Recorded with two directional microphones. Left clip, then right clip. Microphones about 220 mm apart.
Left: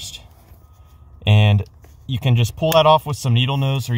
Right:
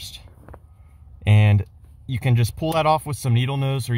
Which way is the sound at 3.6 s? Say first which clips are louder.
Left 3 dB; 25° right (ahead or behind).